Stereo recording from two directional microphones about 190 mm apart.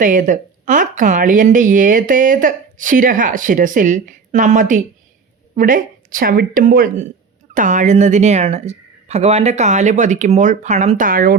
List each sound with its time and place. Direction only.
0.0 s a woman's voice: 45° right (ahead or behind)